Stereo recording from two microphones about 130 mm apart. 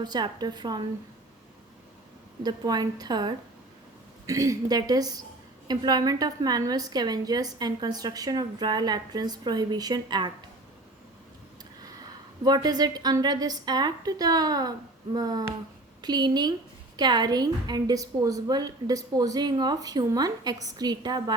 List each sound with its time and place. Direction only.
0.0 s a woman's voice: 30° right (ahead or behind)
2.4 s a woman's voice: 30° right (ahead or behind)
12.5 s a woman's voice: 30° right (ahead or behind)